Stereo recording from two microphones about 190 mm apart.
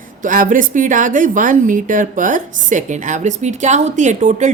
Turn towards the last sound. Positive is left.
turn(degrees=-40)  # may be behind; listen again after turning